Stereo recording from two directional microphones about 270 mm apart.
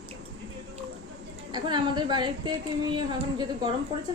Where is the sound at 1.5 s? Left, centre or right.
Centre.